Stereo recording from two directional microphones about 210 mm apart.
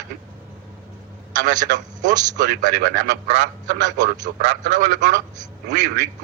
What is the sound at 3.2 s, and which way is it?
Speech, 60° right (ahead or behind).